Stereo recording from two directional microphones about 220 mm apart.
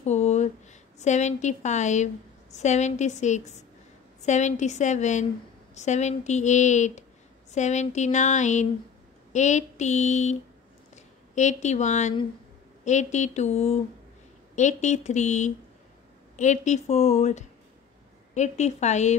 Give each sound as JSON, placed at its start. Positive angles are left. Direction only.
{"t": 0.0, "sound": "speech", "side_deg": 30}
{"t": 11.3, "sound": "speech", "side_deg": 30}